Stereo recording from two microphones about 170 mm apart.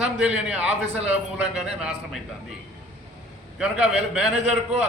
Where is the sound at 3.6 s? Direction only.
5° right (ahead or behind).